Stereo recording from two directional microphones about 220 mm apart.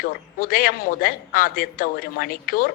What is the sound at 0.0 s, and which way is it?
Speech, 40° left (ahead or behind).